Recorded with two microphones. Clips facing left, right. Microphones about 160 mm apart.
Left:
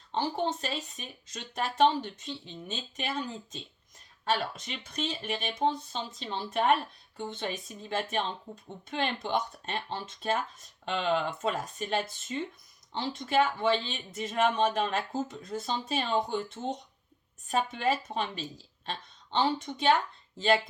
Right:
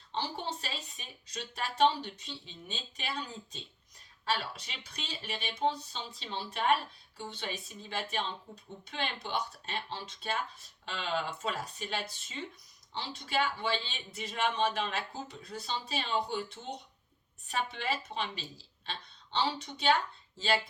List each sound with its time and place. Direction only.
0.1 s speech: 50° left (ahead or behind)